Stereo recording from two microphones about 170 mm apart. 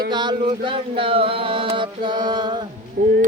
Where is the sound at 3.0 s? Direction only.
50° right (ahead or behind).